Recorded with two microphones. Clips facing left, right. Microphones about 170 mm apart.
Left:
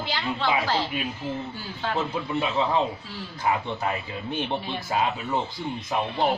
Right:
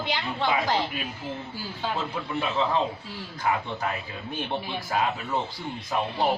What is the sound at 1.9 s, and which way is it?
Speech, 20° left (ahead or behind).